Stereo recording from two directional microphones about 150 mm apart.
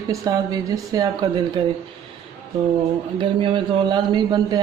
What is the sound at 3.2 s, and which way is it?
Speech, 35° right (ahead or behind).